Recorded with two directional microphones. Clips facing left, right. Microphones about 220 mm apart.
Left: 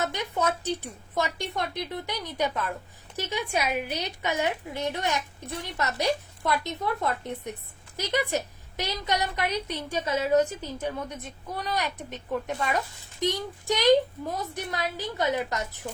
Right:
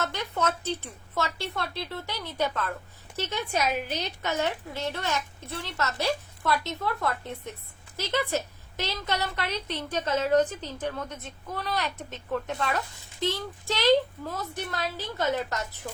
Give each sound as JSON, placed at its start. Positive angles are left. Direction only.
{"t": 0.0, "sound": "a woman's voice", "side_deg": 15}